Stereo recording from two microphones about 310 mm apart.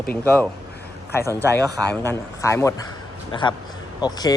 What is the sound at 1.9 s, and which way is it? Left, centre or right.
Speech, centre.